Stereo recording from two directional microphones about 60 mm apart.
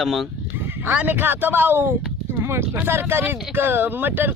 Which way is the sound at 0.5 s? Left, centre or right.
Right.